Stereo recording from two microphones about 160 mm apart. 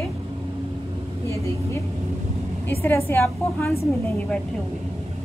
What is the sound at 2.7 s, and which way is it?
A woman's voice, 15° left (ahead or behind).